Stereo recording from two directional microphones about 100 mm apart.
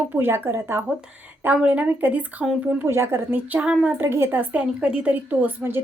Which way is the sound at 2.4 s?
5° right (ahead or behind).